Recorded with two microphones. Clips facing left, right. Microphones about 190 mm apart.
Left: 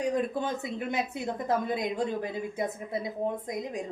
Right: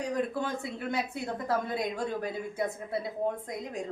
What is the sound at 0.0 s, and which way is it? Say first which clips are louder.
A woman's voice: left 2 dB; 20° left (ahead or behind).